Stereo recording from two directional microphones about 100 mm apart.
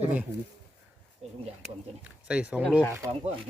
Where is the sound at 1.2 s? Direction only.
90° right.